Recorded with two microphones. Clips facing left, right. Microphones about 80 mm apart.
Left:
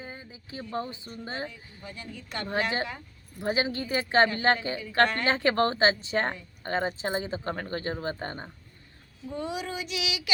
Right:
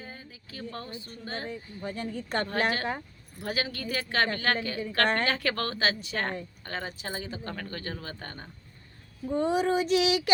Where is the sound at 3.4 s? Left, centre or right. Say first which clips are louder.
Left 4 dB; left.